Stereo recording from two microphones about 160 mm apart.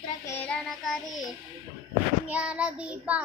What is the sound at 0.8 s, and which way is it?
Child singing, centre (ahead or behind).